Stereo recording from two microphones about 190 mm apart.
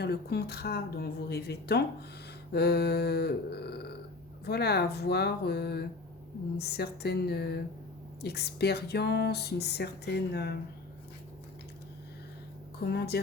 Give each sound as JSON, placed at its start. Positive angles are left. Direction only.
{"t": 0.0, "sound": "speech", "side_deg": 55}
{"t": 12.8, "sound": "speech", "side_deg": 60}